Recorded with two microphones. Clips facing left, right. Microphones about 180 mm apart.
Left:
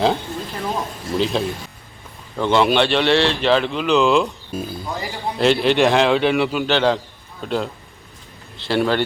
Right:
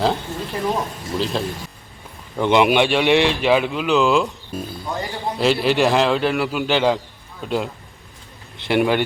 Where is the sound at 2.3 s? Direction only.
15° right (ahead or behind).